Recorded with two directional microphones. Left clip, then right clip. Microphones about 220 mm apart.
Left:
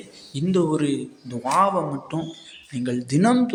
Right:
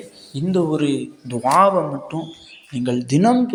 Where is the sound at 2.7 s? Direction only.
15° right (ahead or behind).